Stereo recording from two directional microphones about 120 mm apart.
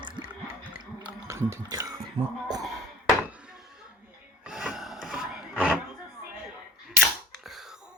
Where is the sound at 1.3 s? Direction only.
25° right (ahead or behind).